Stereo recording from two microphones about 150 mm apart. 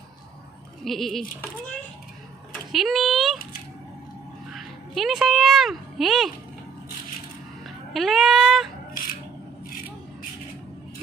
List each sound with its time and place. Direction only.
0.8 s a child's voice: centre (ahead or behind)
2.7 s a child's voice: centre (ahead or behind)
4.5 s speech: centre (ahead or behind)
7.6 s a sound: centre (ahead or behind)
8.9 s single-lens reflex camera: 65° left (ahead or behind)